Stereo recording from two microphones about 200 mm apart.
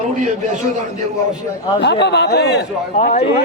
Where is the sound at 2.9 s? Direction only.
35° left (ahead or behind).